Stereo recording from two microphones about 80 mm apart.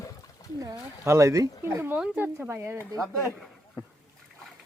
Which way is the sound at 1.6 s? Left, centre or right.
Right.